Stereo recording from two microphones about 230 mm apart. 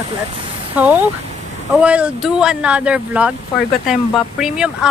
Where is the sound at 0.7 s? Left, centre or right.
Centre.